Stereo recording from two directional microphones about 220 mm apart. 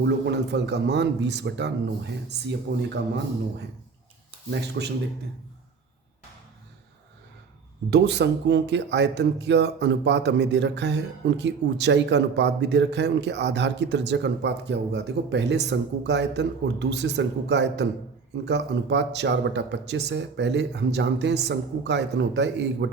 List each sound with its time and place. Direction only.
0.0 s speech: 50° right (ahead or behind)
4.5 s speech: 50° right (ahead or behind)
7.9 s speech: 50° right (ahead or behind)